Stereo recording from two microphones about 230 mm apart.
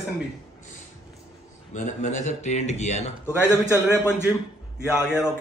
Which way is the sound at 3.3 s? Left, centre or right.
Centre.